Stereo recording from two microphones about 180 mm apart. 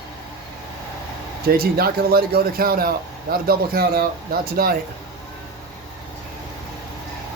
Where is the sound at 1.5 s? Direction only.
55° right (ahead or behind).